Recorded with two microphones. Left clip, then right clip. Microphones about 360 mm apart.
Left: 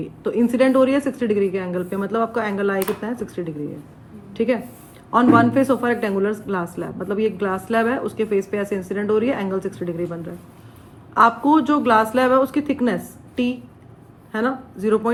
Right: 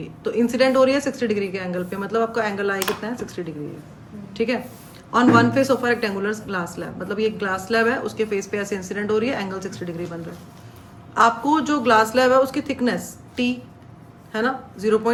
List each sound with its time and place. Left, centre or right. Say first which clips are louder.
0.2 s a woman's voice: left 1 dB; centre
11.1 s a woman's voice: left 2 dB; centre